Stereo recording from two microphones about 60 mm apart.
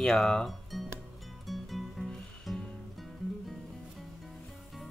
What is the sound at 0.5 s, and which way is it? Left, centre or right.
Music, centre.